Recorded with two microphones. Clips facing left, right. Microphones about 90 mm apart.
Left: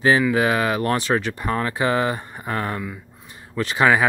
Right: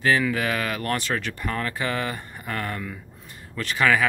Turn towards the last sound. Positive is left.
turn(degrees=25)  # may be behind; listen again after turning